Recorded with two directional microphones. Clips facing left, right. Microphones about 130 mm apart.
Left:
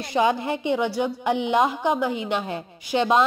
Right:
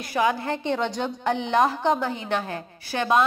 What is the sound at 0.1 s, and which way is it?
A woman's voice, 20° left (ahead or behind).